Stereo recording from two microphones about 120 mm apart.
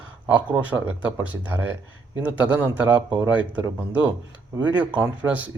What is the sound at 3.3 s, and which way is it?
Speech, 10° right (ahead or behind).